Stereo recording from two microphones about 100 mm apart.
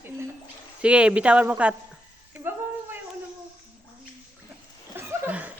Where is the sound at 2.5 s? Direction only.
20° right (ahead or behind).